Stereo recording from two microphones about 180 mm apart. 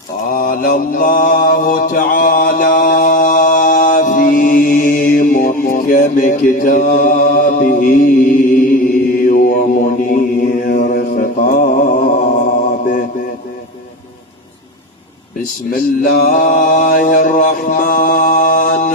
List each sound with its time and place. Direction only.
0.3 s mantra: 50° left (ahead or behind)
15.7 s mantra: 55° left (ahead or behind)